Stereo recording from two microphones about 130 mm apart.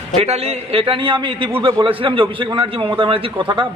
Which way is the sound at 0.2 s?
50° right (ahead or behind).